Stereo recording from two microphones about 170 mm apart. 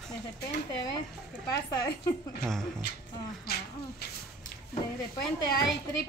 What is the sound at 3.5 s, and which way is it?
Speech, 65° left (ahead or behind).